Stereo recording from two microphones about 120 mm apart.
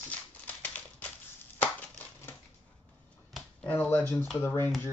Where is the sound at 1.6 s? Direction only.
10° left (ahead or behind).